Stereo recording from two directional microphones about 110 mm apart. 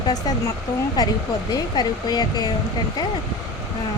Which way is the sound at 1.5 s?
40° left (ahead or behind).